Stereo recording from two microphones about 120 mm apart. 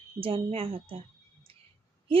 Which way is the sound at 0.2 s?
50° right (ahead or behind).